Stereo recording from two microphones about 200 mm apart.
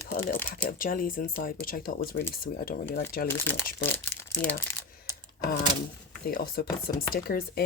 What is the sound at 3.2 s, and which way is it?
Speech, 10° left (ahead or behind).